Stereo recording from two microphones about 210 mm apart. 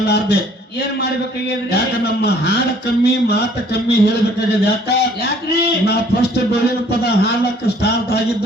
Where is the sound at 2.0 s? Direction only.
50° left (ahead or behind).